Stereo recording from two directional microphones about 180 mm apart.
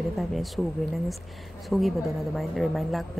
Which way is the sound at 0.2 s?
Centre (ahead or behind).